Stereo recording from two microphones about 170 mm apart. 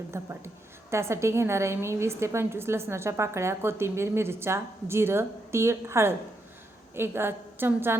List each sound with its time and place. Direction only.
0.1 s a woman's voice: 15° right (ahead or behind)